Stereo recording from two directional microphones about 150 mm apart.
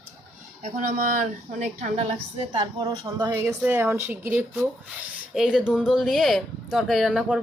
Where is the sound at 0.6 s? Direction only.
65° right (ahead or behind).